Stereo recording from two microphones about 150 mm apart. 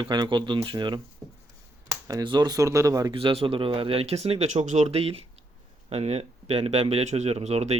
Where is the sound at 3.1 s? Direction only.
35° right (ahead or behind).